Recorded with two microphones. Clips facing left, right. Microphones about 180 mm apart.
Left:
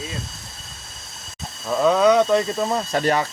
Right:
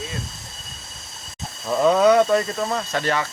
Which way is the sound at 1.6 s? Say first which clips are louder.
Even; 5° right (ahead or behind).